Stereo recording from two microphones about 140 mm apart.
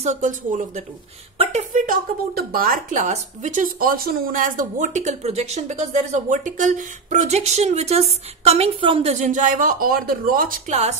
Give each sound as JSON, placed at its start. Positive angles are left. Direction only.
{"t": 0.0, "sound": "speech", "side_deg": -60}
{"t": 9.2, "sound": "speech", "side_deg": -65}
{"t": 10.7, "sound": "speech", "side_deg": -50}